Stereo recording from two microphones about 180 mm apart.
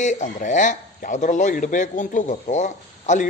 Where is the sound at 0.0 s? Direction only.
40° left (ahead or behind).